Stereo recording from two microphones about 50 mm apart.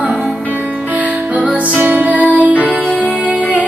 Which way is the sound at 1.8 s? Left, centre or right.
Right.